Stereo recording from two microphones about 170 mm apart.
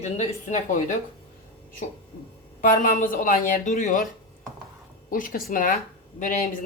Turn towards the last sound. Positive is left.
turn(degrees=45)  # may be behind; listen again after turning